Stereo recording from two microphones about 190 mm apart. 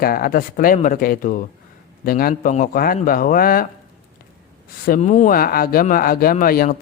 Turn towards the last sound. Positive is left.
turn(degrees=50)  # may be behind; listen again after turning